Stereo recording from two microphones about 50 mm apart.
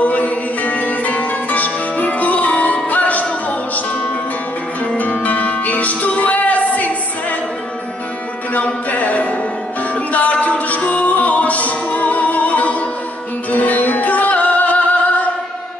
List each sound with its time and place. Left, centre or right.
0.0 s music: left
8.5 s music: left